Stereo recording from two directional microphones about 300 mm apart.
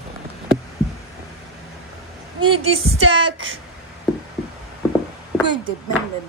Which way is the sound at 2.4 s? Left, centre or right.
Centre.